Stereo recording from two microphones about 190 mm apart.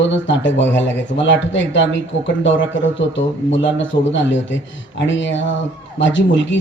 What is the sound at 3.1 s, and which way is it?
Speech, 75° left (ahead or behind).